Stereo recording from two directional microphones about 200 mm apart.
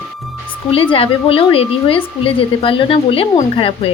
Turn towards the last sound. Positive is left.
turn(degrees=25)  # may be behind; listen again after turning